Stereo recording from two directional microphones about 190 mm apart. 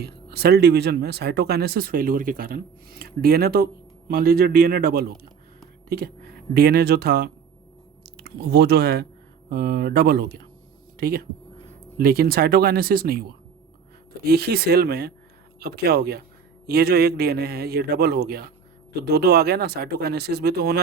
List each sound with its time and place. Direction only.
0.0 s speech: 55° right (ahead or behind)
14.3 s speech: 55° right (ahead or behind)